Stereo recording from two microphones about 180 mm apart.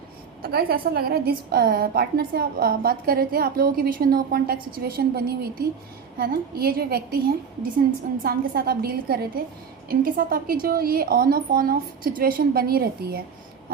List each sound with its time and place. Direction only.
0.4 s a woman's voice: 55° right (ahead or behind)